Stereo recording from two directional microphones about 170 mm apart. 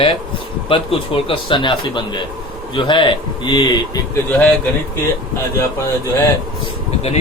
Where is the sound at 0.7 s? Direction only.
30° left (ahead or behind).